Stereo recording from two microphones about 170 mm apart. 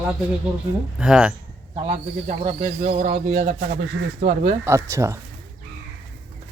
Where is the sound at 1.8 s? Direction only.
40° right (ahead or behind).